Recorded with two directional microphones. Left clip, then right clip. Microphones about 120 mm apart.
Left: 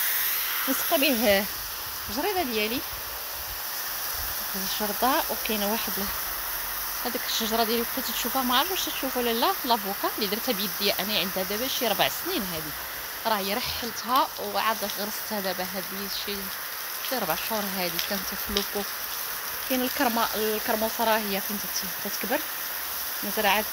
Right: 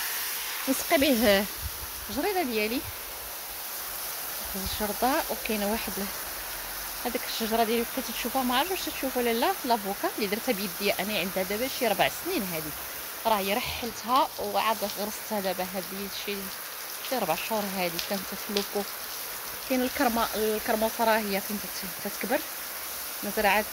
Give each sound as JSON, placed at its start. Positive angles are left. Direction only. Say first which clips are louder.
{"t": 0.7, "sound": "speech", "louder": "right 1 dB", "side_deg": -35}
{"t": 2.1, "sound": "speech", "louder": "left 1 dB", "side_deg": -5}
{"t": 4.7, "sound": "speech", "louder": "left 2 dB", "side_deg": 0}
{"t": 7.1, "sound": "speech", "louder": "left 1 dB", "side_deg": -5}
{"t": 17.1, "sound": "speech", "louder": "right 1 dB", "side_deg": 0}
{"t": 19.7, "sound": "speech", "louder": "even", "side_deg": 0}
{"t": 23.3, "sound": "speech", "louder": "even", "side_deg": 0}